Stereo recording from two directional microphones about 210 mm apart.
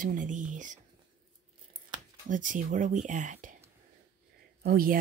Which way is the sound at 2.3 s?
40° right (ahead or behind).